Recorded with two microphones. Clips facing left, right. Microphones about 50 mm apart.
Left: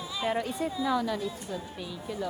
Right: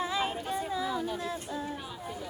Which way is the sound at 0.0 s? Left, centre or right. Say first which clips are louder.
Right 5 dB; right.